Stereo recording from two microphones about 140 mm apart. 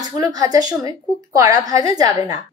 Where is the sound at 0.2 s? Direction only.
25° right (ahead or behind).